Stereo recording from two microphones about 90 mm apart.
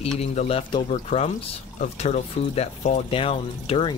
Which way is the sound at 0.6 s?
60° left (ahead or behind).